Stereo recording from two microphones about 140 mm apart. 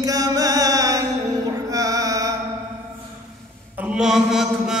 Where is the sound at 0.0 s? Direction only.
25° right (ahead or behind).